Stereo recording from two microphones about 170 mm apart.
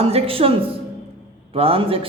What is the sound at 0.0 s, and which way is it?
Speech, 35° right (ahead or behind).